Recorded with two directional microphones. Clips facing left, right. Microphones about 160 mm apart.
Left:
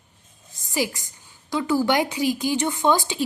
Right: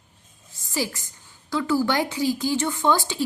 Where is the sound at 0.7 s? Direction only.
15° left (ahead or behind).